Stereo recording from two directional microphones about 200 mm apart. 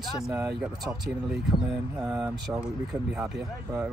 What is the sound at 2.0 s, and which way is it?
Speech, 10° right (ahead or behind).